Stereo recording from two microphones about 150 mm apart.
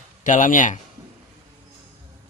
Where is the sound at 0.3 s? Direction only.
60° left (ahead or behind).